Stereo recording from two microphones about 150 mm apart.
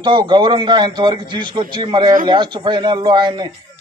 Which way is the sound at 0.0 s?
30° right (ahead or behind).